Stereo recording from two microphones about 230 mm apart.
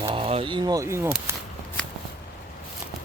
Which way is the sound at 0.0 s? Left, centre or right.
Right.